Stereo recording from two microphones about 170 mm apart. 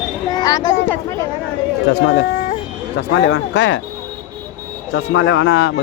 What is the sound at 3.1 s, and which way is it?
Speech, 90° left.